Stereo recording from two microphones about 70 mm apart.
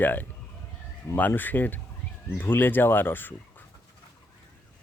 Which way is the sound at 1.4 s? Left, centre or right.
Left.